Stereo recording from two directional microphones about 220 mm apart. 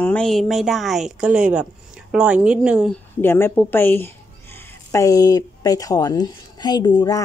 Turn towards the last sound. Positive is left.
turn(degrees=15)  # may be behind; listen again after turning